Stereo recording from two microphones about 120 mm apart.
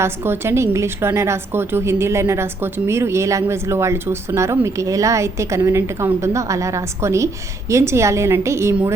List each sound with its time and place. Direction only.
0.0 s a woman's voice: 20° right (ahead or behind)